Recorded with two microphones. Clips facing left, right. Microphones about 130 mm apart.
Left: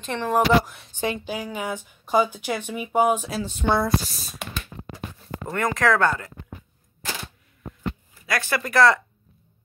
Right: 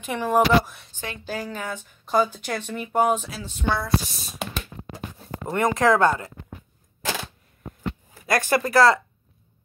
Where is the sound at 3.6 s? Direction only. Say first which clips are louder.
Left 4 dB; 20° left (ahead or behind).